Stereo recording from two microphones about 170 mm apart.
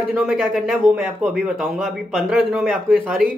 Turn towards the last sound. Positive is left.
turn(degrees=5)  # may be behind; listen again after turning